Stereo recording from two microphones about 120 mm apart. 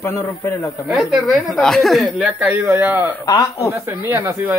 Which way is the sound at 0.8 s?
Centre (ahead or behind).